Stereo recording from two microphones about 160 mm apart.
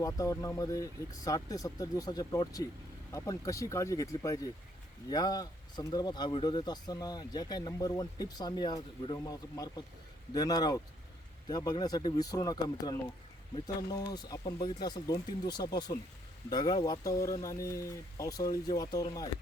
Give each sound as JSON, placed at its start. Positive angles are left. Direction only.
{"t": 0.0, "sound": "speech", "side_deg": 20}
{"t": 10.3, "sound": "speech", "side_deg": 25}